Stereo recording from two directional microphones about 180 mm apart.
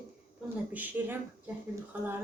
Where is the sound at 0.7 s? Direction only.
10° right (ahead or behind).